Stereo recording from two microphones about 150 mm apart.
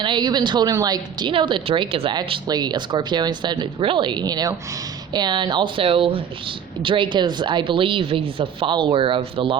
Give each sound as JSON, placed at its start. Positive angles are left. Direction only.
{"t": 0.0, "sound": "a woman's voice", "side_deg": -30}